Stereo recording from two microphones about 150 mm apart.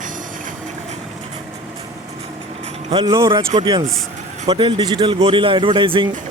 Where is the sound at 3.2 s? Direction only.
20° right (ahead or behind).